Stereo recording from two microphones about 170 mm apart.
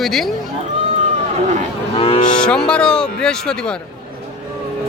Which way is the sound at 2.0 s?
30° left (ahead or behind).